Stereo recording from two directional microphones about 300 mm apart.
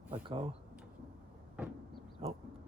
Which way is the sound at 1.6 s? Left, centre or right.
Centre.